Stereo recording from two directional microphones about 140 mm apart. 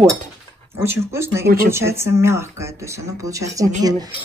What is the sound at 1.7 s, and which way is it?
A woman's voice, 20° right (ahead or behind).